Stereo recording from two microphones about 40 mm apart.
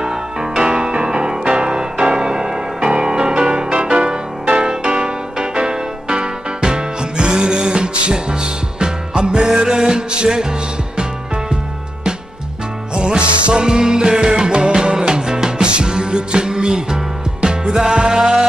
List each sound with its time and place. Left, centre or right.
0.0 s music: centre
12.9 s music: right